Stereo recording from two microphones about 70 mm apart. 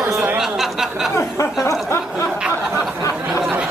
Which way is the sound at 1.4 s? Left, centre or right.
Left.